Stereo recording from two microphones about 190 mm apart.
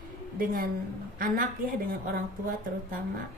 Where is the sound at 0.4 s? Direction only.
50° right (ahead or behind).